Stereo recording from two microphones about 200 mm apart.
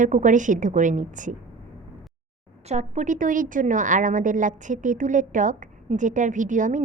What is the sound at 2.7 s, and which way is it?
A woman's voice, 35° right (ahead or behind).